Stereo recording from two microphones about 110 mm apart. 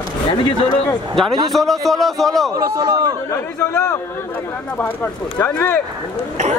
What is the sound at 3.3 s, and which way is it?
Speech, 25° left (ahead or behind).